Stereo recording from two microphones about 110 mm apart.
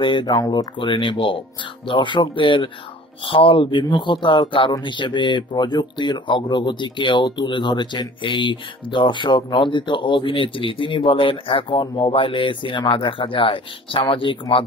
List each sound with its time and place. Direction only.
0.0 s speech: 45° left (ahead or behind)
0.7 s speech: 50° left (ahead or behind)